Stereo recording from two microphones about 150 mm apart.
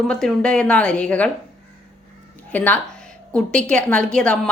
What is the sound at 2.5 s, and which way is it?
A woman's voice, 10° left (ahead or behind).